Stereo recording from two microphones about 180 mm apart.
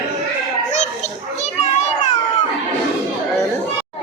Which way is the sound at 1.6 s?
40° left (ahead or behind).